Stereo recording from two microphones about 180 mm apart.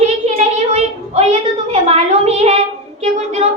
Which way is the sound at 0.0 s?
35° right (ahead or behind).